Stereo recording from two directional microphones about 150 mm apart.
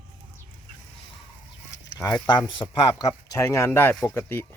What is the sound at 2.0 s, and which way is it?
Speech, 25° left (ahead or behind).